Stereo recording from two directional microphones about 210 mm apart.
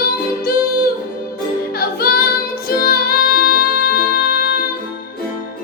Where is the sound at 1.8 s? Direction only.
45° left (ahead or behind).